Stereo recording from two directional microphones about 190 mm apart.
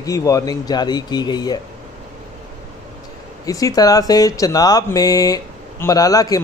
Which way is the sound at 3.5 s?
20° left (ahead or behind).